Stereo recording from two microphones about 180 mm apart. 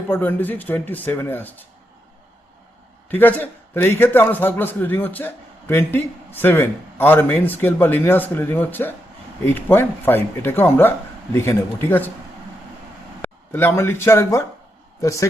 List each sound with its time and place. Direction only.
0.1 s a man's voice: 10° left (ahead or behind)
3.1 s a man's voice: 10° left (ahead or behind)
13.2 s a man's voice: 10° left (ahead or behind)